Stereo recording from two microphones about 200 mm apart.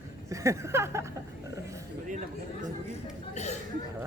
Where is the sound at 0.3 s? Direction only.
15° right (ahead or behind).